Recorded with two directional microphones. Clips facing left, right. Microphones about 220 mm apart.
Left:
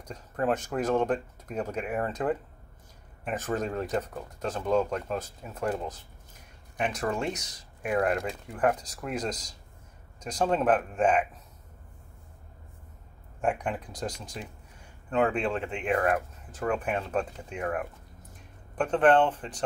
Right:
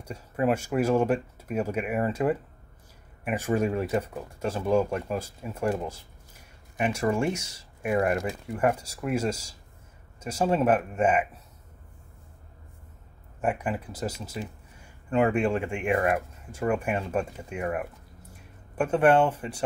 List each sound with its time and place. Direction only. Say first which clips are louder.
0.0 s speech: right 3 dB; 10° right (ahead or behind)
13.4 s speech: right 1 dB; 5° right (ahead or behind)